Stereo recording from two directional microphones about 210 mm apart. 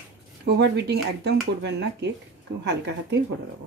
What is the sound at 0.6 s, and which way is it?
A woman's voice, 55° right (ahead or behind).